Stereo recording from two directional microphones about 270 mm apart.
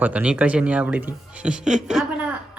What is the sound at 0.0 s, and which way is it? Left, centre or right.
Speech, centre.